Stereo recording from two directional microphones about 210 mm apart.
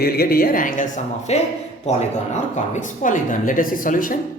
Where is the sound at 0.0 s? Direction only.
45° left (ahead or behind).